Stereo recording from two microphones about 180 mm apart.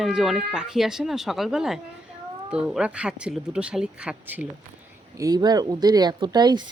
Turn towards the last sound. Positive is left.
turn(degrees=-25)  # may be behind; listen again after turning